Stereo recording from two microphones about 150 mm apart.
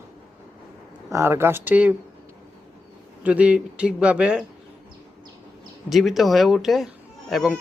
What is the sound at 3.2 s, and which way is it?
Speech, 10° right (ahead or behind).